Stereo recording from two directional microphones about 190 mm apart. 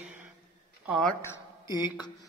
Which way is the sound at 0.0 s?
10° right (ahead or behind).